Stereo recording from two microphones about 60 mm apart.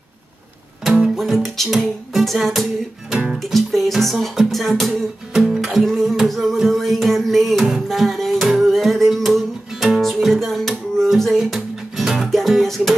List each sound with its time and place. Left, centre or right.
0.8 s music: centre
1.7 s music: centre
3.1 s music: centre
3.3 s music: centre
5.9 s a sound: centre
7.6 s music: centre
8.0 s music: centre